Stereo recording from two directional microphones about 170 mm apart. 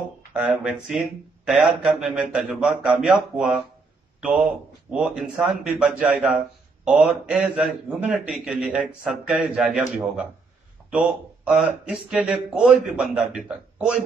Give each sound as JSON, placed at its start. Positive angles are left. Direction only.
{"t": 0.3, "sound": "a man's voice", "side_deg": -5}
{"t": 4.9, "sound": "a man's voice", "side_deg": -5}